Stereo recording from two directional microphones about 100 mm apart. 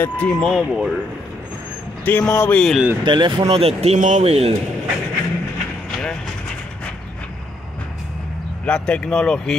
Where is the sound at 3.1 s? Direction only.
50° right (ahead or behind); by 4.6 s 85° right.